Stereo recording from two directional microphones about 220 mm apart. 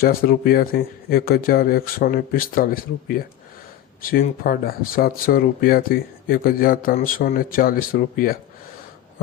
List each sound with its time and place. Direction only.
0.0 s speech: 40° left (ahead or behind)